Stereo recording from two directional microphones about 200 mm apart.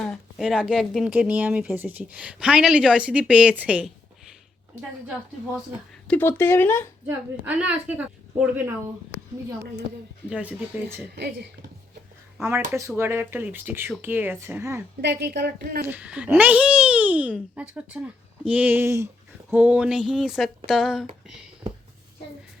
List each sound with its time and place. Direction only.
0.0 s speech: centre (ahead or behind)
6.1 s speech: 10° left (ahead or behind)
7.1 s a child's voice: 5° right (ahead or behind)
9.1 s a sound: 65° left (ahead or behind)
10.2 s a child's voice: 5° right (ahead or behind)
11.1 s speech: 55° right (ahead or behind)
12.4 s a child's voice: 15° right (ahead or behind)
15.0 s a woman's voice: 55° right (ahead or behind)
15.9 s a child's voice: 5° right (ahead or behind)